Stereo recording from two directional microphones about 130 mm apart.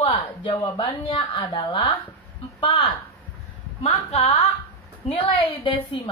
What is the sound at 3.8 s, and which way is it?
A woman's voice, 55° left (ahead or behind).